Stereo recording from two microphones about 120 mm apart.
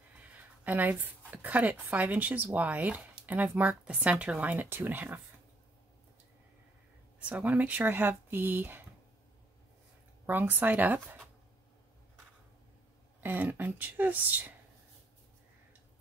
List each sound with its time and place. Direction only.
0.4 s a sound: 15° right (ahead or behind)
1.3 s speech: 15° right (ahead or behind)
7.2 s speech: 10° right (ahead or behind)
10.2 s speech: 15° right (ahead or behind)
13.2 s speech: 15° right (ahead or behind)